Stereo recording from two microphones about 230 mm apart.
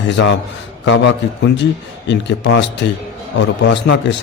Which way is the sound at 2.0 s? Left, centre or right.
Left.